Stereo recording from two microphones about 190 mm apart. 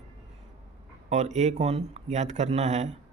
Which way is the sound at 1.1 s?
40° right (ahead or behind).